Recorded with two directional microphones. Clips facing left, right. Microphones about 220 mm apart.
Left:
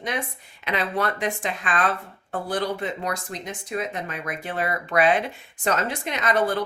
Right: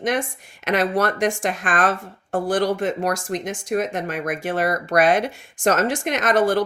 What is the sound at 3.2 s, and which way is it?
Speech, 90° right.